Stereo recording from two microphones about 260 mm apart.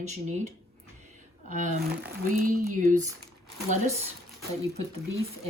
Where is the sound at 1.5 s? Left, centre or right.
Right.